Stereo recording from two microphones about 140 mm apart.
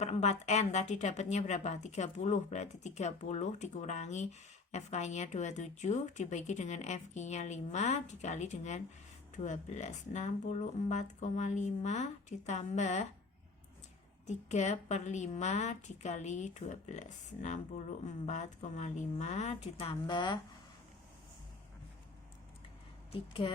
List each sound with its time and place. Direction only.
0.0 s a woman's voice: 50° left (ahead or behind)
14.3 s a woman's voice: 55° left (ahead or behind); by 20.4 s 30° left (ahead or behind)
23.1 s speech: 40° left (ahead or behind)